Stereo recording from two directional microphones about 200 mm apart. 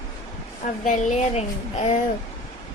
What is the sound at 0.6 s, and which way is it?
A woman's voice, 40° left (ahead or behind).